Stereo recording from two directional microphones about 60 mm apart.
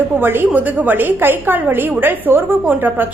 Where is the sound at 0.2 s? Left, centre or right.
Right.